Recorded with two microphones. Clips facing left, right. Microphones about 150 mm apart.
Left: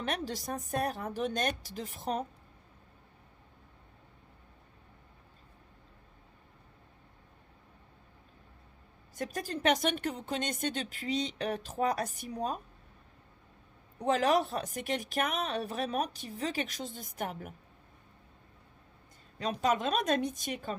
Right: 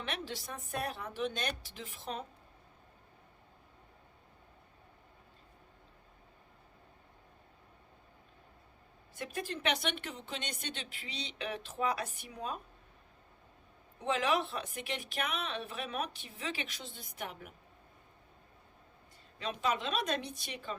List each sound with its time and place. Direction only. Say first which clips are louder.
0.0 s a woman's voice: left 5 dB; 40° left (ahead or behind)
9.1 s speech: left 3 dB; 40° left (ahead or behind)
14.0 s a woman's voice: left 5 dB; 40° left (ahead or behind)
19.4 s speech: left 5 dB; 45° left (ahead or behind)